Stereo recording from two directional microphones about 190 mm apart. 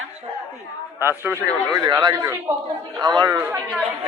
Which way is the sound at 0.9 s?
10° right (ahead or behind).